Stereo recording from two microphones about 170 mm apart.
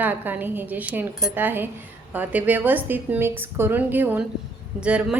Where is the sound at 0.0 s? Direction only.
10° right (ahead or behind).